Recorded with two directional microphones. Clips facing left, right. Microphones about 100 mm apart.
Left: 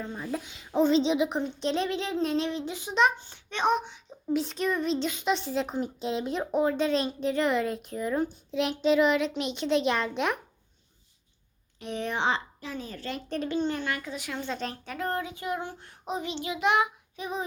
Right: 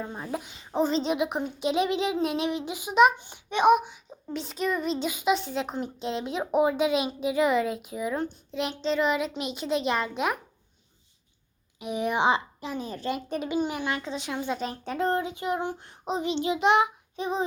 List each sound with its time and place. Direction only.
0.2 s a child's voice: 5° right (ahead or behind)
6.5 s speech: 15° right (ahead or behind)
11.8 s a child's voice: 10° right (ahead or behind)